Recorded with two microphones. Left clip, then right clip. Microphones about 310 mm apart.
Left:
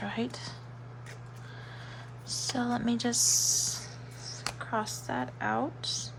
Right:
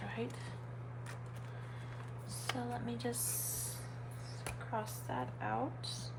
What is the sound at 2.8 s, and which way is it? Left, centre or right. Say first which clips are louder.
Speech: left 11 dB; left.